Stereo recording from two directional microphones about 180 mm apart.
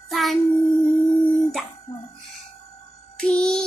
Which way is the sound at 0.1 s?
Centre (ahead or behind).